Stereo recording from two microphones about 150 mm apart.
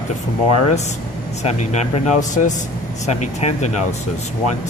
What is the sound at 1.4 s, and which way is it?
A man's voice, 50° left (ahead or behind).